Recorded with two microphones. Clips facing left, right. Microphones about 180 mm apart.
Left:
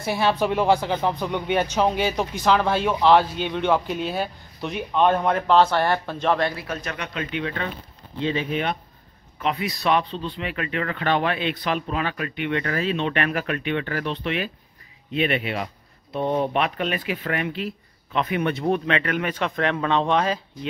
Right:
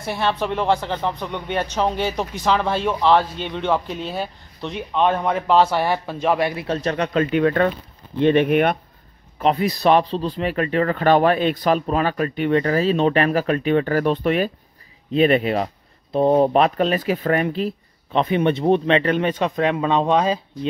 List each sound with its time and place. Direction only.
0.0 s speech: 5° left (ahead or behind)
6.5 s speech: 25° right (ahead or behind); by 7.7 s 50° right (ahead or behind)
8.2 s speech: 60° right (ahead or behind)
9.4 s speech: 35° right (ahead or behind); by 20.3 s 15° right (ahead or behind)